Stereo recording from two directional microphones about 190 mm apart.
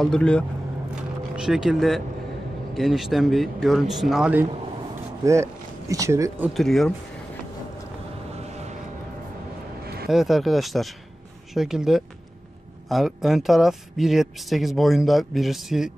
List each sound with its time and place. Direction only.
0.0 s speech: 5° left (ahead or behind)
4.5 s a sound: 30° right (ahead or behind)
5.2 s speech: 15° right (ahead or behind)
6.5 s speech: centre (ahead or behind)
10.0 s speech: centre (ahead or behind)